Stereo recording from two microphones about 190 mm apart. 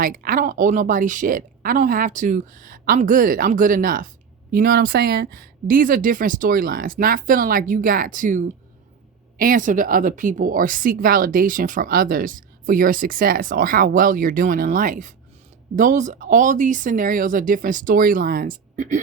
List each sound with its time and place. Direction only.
0.0 s speech: 50° right (ahead or behind)